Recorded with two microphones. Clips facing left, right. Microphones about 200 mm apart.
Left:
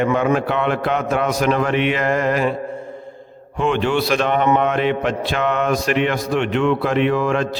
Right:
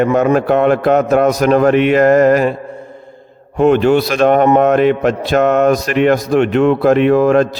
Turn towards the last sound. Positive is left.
turn(degrees=-40)  # may be behind; listen again after turning